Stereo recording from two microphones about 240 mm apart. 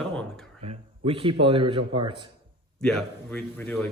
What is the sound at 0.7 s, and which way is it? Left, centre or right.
A man's voice, right.